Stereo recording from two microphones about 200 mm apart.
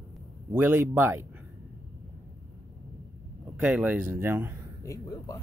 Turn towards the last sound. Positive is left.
turn(degrees=15)  # may be behind; listen again after turning